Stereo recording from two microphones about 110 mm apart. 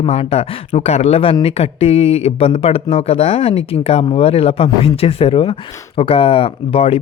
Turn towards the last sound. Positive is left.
turn(degrees=55)  # may be behind; listen again after turning